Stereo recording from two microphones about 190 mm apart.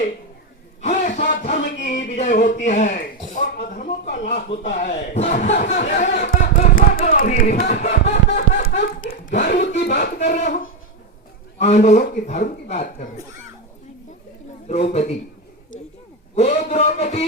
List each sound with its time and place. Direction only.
0.8 s a sound: 40° left (ahead or behind)
2.6 s a man's voice: 40° left (ahead or behind)
6.2 s music: 45° left (ahead or behind)
7.7 s a sound: 60° left (ahead or behind)
9.0 s speech: 45° left (ahead or behind)
9.6 s speech: 60° left (ahead or behind)
10.0 s a man's voice: 40° left (ahead or behind)
14.7 s a man's voice: 35° left (ahead or behind)
16.3 s a man's voice: 35° left (ahead or behind)